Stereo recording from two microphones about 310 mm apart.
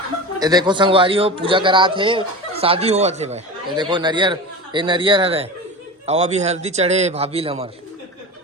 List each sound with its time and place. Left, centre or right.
0.3 s a man's voice: centre